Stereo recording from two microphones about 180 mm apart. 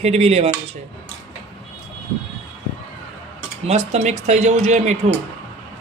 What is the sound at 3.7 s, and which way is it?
Speech, 40° right (ahead or behind).